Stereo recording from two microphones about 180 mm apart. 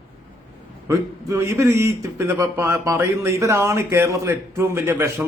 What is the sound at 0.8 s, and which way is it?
A man's voice, 15° right (ahead or behind).